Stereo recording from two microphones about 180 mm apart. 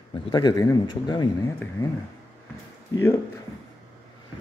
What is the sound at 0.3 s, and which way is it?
A man's voice, 25° left (ahead or behind).